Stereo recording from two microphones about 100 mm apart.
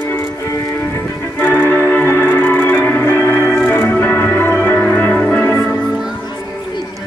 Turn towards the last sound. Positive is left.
turn(degrees=25)  # may be behind; listen again after turning